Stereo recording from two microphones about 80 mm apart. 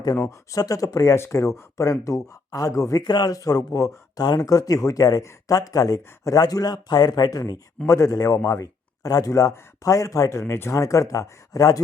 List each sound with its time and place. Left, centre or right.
0.3 s speech: left
1.1 s speech: left
3.0 s speech: left
10.4 s speech: left